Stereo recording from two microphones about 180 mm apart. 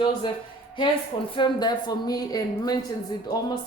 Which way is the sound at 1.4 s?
25° left (ahead or behind).